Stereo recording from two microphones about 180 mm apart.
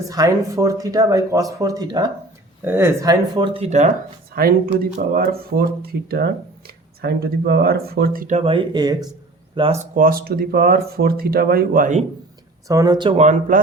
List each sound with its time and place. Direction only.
0.1 s speech: 20° right (ahead or behind); by 3.9 s 40° right (ahead or behind)
4.4 s speech: 55° right (ahead or behind); by 9.8 s 30° right (ahead or behind)
9.9 s speech: 50° right (ahead or behind)
12.6 s speech: 20° right (ahead or behind)
13.1 s speech: 40° right (ahead or behind)